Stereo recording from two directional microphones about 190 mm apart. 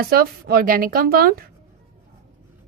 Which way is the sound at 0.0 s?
55° right (ahead or behind).